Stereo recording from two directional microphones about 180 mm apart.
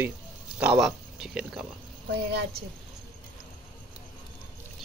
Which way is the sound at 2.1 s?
65° right (ahead or behind).